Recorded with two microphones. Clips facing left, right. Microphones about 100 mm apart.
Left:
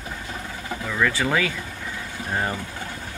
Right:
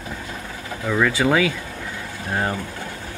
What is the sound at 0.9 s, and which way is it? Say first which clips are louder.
Speech: right 4 dB; 15° right (ahead or behind).